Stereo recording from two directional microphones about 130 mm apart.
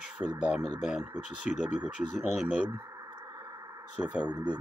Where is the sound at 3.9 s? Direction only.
10° right (ahead or behind).